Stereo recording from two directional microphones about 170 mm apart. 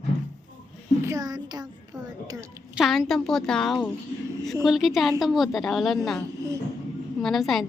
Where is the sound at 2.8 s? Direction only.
Centre (ahead or behind).